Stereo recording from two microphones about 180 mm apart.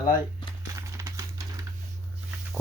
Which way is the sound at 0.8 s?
15° right (ahead or behind).